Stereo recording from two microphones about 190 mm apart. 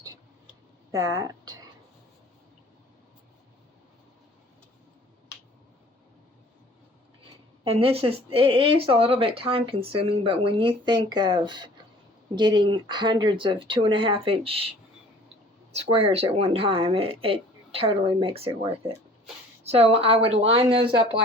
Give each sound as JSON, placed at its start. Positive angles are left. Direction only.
{"t": 0.9, "sound": "speech", "side_deg": -15}
{"t": 7.6, "sound": "speech", "side_deg": -30}
{"t": 15.7, "sound": "speech", "side_deg": -30}